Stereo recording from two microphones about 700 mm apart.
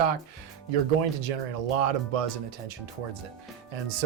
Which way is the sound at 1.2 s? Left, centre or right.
Right.